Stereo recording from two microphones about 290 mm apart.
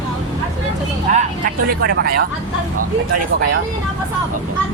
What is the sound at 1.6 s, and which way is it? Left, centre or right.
Speech, right.